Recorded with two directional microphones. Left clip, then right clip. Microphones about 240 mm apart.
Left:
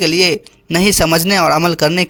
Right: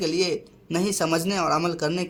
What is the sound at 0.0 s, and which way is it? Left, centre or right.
A man's voice, left.